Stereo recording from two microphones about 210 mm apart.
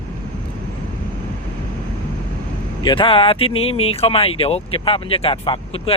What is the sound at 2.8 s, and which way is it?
Speech, 25° left (ahead or behind).